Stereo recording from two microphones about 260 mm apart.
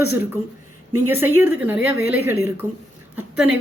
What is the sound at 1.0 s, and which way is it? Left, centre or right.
A woman's voice, centre.